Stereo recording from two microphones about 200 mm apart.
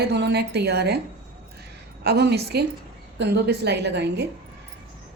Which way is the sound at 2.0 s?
55° right (ahead or behind).